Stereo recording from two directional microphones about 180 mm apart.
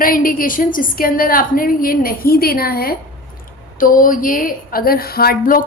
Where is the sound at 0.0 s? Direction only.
50° left (ahead or behind).